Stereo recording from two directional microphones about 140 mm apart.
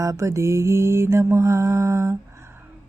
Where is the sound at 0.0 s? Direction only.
20° right (ahead or behind).